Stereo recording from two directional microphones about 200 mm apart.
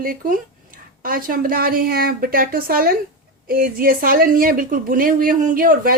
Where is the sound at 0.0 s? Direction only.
45° right (ahead or behind).